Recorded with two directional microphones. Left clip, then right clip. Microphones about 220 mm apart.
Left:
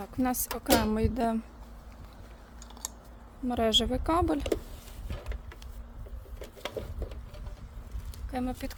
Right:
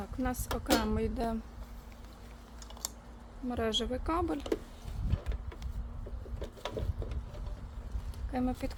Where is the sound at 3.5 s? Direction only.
40° left (ahead or behind).